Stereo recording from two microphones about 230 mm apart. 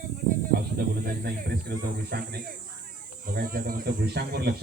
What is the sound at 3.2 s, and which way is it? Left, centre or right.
Speech, right.